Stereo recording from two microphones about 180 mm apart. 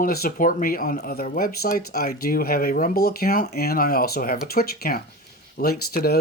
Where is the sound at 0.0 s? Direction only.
55° left (ahead or behind).